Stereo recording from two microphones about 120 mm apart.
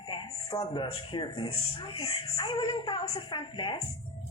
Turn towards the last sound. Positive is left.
turn(degrees=40)  # may be behind; listen again after turning